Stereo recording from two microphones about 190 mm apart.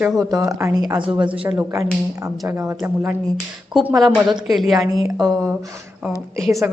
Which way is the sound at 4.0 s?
Centre (ahead or behind).